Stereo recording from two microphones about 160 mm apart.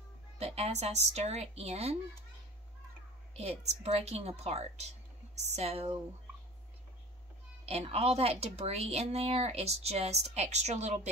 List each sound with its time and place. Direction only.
0.4 s speech: 40° right (ahead or behind)
3.3 s speech: 40° right (ahead or behind)
7.6 s speech: 40° right (ahead or behind)